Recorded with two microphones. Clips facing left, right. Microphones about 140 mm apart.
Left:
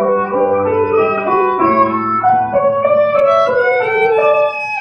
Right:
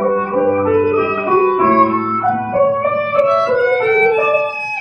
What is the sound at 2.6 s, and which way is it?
Music, 15° left (ahead or behind).